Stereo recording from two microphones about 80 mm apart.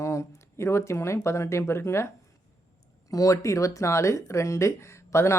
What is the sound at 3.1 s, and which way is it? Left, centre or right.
Speech, left.